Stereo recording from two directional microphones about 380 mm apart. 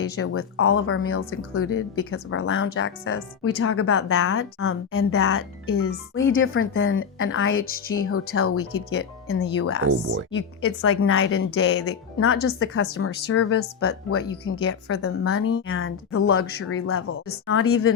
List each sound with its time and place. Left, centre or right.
0.0 s speech: left